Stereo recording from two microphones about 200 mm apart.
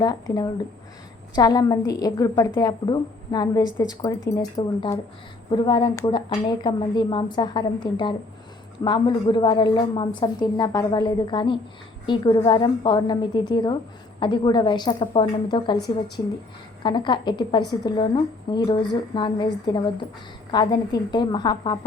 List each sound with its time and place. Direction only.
0.0 s a woman's voice: 20° left (ahead or behind)
16.8 s a woman's voice: 25° left (ahead or behind)